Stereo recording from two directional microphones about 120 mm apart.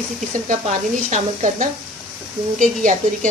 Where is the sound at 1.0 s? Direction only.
85° right.